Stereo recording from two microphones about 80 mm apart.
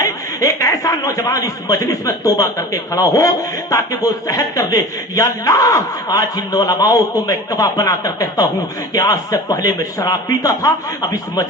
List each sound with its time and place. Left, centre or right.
0.0 s a man's voice: left